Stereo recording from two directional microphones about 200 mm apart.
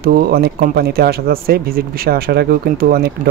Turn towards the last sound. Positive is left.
turn(degrees=-50)  # may be behind; listen again after turning